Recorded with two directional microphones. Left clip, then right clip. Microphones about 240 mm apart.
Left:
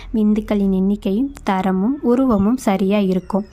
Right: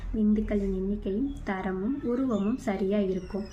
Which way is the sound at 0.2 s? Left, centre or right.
Left.